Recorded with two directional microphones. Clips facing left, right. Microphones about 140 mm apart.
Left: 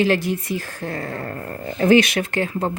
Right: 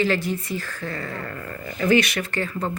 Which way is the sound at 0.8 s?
45° left (ahead or behind).